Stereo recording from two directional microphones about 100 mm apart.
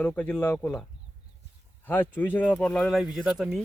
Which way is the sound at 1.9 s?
20° left (ahead or behind).